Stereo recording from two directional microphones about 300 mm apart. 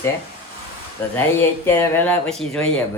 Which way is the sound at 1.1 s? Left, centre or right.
Centre.